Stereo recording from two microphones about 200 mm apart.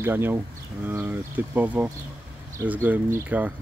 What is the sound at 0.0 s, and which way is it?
Speech, 10° right (ahead or behind).